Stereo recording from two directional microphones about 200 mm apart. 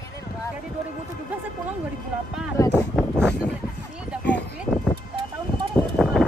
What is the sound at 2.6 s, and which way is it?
Speech, 15° left (ahead or behind).